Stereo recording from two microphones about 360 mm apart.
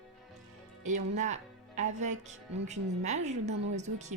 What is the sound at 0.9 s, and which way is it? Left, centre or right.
Speech, centre.